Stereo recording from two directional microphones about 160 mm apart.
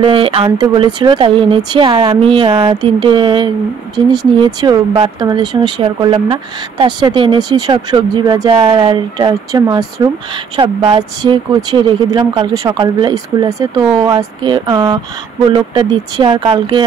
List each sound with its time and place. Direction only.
0.0 s a woman's voice: 35° right (ahead or behind)